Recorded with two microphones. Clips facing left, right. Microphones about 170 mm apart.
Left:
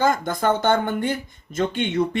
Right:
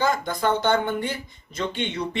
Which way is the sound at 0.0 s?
50° left (ahead or behind).